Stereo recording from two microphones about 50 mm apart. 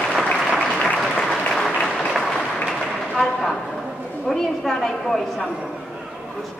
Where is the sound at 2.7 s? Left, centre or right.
Centre.